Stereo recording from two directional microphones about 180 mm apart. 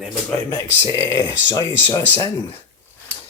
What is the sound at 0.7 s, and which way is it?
Speech, 15° left (ahead or behind).